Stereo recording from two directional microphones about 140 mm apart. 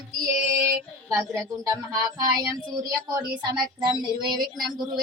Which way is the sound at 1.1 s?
25° right (ahead or behind).